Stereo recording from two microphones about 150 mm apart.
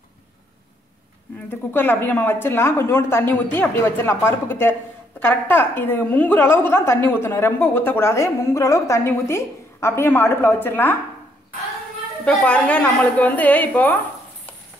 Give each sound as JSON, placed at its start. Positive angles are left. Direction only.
{"t": 1.5, "sound": "a woman's voice", "side_deg": 15}
{"t": 12.3, "sound": "a woman's voice", "side_deg": 10}